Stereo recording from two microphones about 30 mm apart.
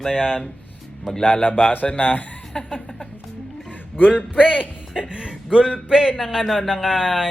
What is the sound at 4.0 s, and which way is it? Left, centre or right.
Speech, left.